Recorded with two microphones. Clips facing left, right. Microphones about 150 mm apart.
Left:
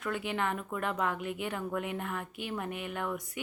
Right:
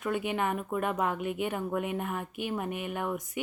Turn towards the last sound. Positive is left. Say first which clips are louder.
# right 3 dB
turn(degrees=-20)  # may be behind; listen again after turning